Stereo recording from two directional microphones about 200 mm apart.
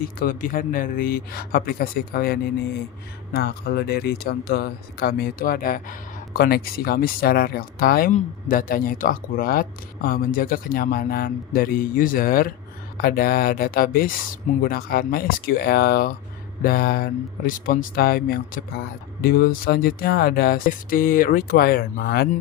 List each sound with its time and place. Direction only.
0.0 s speech: 45° left (ahead or behind)